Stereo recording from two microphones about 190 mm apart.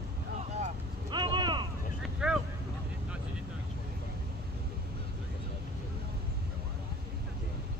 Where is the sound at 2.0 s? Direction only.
5° right (ahead or behind).